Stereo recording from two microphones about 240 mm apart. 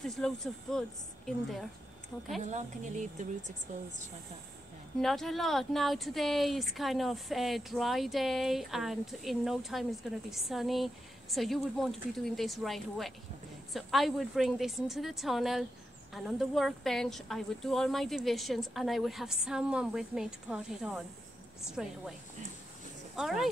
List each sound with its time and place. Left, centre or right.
0.0 s speech: centre
2.4 s speech: right
5.0 s speech: centre
23.1 s speech: centre